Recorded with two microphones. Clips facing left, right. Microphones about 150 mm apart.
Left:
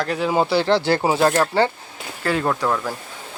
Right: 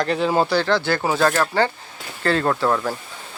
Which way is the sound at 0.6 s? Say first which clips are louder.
Left 2 dB; 30° left (ahead or behind).